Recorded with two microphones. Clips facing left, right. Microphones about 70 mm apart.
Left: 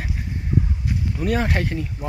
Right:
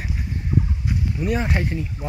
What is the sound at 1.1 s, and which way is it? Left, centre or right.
Speech, left.